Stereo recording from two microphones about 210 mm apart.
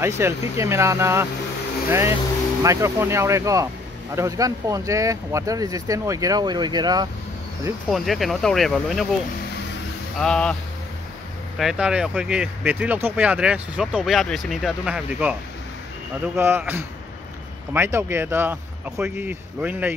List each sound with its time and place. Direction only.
0.0 s speech: 10° right (ahead or behind)
7.9 s speech: centre (ahead or behind)
10.2 s speech: 5° left (ahead or behind)
11.5 s speech: 5° right (ahead or behind)
16.3 s speech: 10° right (ahead or behind)